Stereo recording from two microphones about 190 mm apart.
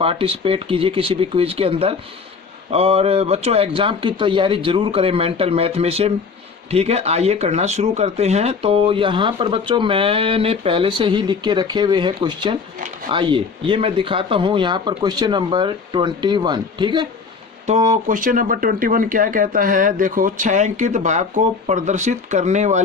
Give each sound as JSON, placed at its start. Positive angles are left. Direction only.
{"t": 0.0, "sound": "a man's voice", "side_deg": -30}
{"t": 18.1, "sound": "speech", "side_deg": -45}